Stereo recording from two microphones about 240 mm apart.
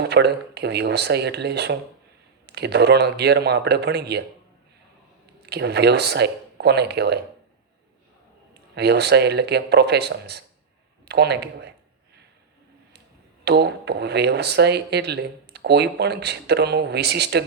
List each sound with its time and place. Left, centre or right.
0.0 s speech: right
5.5 s speech: right
8.7 s speech: right
13.4 s speech: right